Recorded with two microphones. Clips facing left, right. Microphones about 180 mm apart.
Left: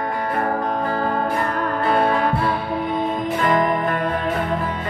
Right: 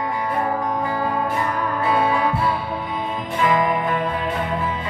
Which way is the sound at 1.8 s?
55° left (ahead or behind).